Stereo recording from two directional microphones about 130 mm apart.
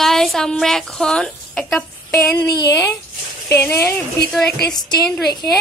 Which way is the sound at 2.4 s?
30° left (ahead or behind).